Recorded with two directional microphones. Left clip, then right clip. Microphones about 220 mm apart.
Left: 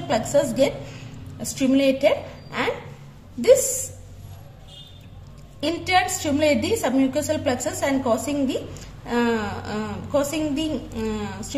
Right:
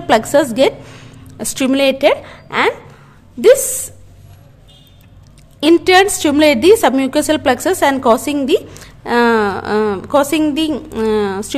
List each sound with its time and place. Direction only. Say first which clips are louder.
0.1 s a woman's voice: right 9 dB; 45° right (ahead or behind)
5.6 s a woman's voice: right 11 dB; 45° right (ahead or behind)